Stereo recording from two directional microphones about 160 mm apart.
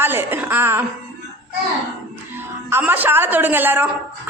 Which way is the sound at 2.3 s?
15° right (ahead or behind).